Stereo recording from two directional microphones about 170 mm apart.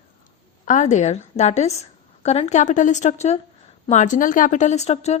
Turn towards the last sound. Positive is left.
turn(degrees=40)  # may be behind; listen again after turning